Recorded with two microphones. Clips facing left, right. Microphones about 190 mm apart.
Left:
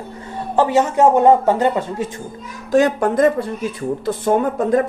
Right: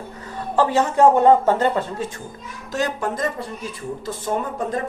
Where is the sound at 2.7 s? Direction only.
55° left (ahead or behind).